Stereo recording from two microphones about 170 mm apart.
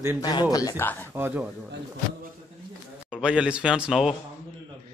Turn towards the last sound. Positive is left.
turn(degrees=-5)  # may be behind; listen again after turning